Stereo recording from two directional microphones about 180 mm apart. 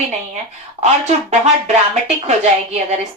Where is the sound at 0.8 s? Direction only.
40° right (ahead or behind).